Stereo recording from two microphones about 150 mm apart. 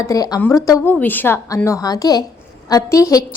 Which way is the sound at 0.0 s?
25° left (ahead or behind).